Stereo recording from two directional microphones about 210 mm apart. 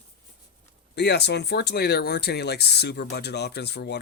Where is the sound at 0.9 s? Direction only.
50° left (ahead or behind).